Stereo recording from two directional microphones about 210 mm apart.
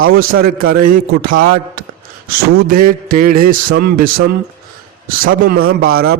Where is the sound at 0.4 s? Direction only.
45° right (ahead or behind).